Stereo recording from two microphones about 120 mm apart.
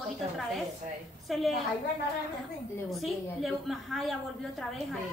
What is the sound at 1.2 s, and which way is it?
Speech, centre (ahead or behind).